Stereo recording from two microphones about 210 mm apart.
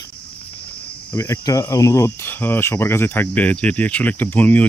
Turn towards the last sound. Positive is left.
turn(degrees=5)  # may be behind; listen again after turning